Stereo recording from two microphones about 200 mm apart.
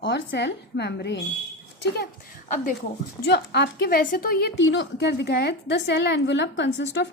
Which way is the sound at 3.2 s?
55° left (ahead or behind).